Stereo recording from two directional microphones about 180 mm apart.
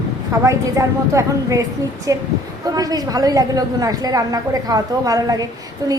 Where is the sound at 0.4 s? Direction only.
15° right (ahead or behind).